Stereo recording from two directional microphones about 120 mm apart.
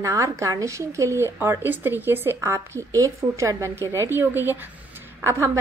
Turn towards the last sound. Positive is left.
turn(degrees=-20)  # may be behind; listen again after turning